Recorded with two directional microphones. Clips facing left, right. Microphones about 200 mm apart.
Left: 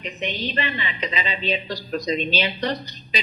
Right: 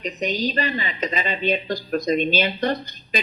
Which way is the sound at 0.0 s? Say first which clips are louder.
Right 4 dB; 40° right (ahead or behind).